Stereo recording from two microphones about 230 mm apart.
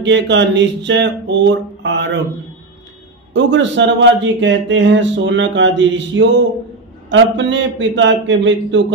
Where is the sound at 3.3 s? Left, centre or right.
Right.